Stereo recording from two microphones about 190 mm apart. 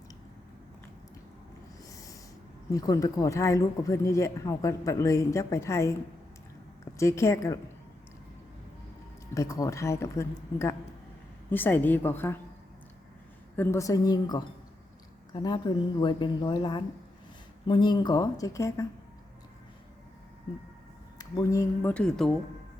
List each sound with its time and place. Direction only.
1.9 s owl: 20° left (ahead or behind)
2.7 s speech: 20° left (ahead or behind)
6.9 s speech: 15° left (ahead or behind)
9.3 s speech: 15° left (ahead or behind)
13.6 s speech: 15° left (ahead or behind)
21.2 s speech: 20° left (ahead or behind)
21.9 s speech: 5° left (ahead or behind)